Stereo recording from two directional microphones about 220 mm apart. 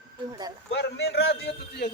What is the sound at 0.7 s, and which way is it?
A man's voice, 50° left (ahead or behind).